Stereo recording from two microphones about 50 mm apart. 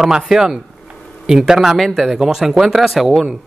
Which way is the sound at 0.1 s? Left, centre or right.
Centre.